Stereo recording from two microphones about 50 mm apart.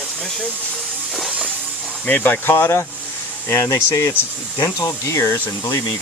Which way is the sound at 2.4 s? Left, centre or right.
Left.